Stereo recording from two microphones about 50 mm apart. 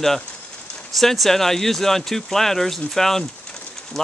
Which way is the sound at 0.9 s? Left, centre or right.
Centre.